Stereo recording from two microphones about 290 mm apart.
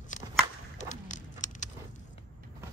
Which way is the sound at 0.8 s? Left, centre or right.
Left.